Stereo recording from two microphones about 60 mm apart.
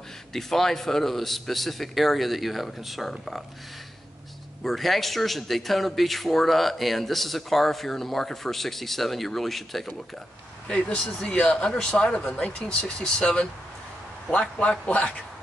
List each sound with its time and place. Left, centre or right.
0.3 s speech: centre
4.6 s speech: centre
10.7 s speech: centre
14.6 s speech: left